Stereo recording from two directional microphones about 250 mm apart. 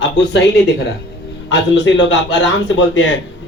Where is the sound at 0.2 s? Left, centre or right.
Left.